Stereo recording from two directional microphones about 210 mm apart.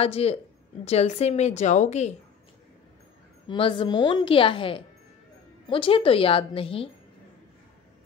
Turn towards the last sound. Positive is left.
turn(degrees=25)  # may be behind; listen again after turning